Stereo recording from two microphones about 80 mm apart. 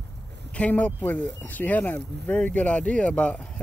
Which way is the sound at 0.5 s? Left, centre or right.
Centre.